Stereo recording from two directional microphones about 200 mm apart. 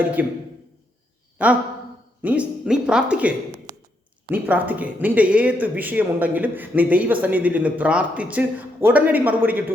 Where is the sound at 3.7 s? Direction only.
20° right (ahead or behind).